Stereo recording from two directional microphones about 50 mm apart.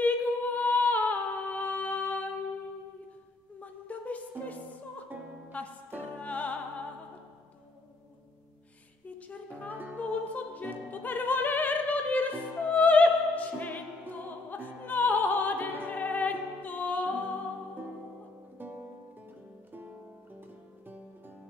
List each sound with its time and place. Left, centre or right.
0.0 s a capella: left
3.6 s music: left
9.0 s music: left
9.9 s opera: left
15.9 s music: left
18.6 s music: right